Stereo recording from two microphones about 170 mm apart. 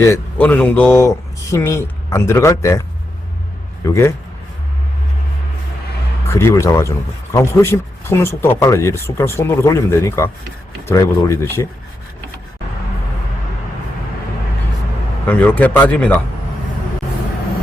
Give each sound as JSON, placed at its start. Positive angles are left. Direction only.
{"t": 0.0, "sound": "speech", "side_deg": 10}
{"t": 3.8, "sound": "speech", "side_deg": 15}
{"t": 6.2, "sound": "speech", "side_deg": 15}
{"t": 15.3, "sound": "speech", "side_deg": 10}